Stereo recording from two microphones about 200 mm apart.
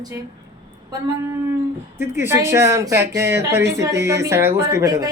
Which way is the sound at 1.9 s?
10° right (ahead or behind).